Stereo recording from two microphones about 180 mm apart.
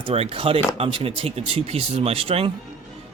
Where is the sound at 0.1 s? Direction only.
30° right (ahead or behind).